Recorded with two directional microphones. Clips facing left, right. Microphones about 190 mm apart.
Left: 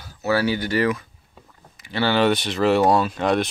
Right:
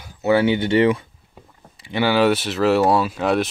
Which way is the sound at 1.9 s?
10° right (ahead or behind).